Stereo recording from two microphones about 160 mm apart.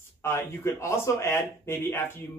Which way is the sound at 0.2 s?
15° left (ahead or behind).